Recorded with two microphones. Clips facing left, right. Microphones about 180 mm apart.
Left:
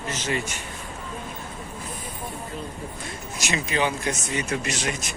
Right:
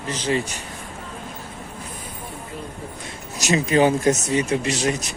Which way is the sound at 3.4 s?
40° right (ahead or behind).